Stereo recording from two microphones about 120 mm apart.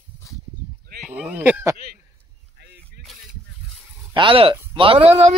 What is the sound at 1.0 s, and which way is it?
Speech, 10° right (ahead or behind).